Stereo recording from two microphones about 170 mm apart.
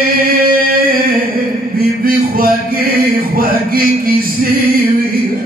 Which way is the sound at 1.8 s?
60° right (ahead or behind).